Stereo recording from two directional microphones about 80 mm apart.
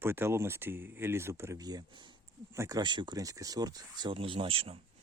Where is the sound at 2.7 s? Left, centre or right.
Right.